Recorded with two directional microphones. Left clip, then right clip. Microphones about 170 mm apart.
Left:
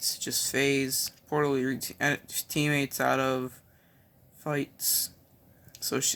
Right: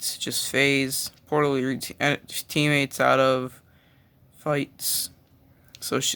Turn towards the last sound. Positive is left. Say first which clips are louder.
# right 4 dB
turn(degrees=-30)  # may be behind; listen again after turning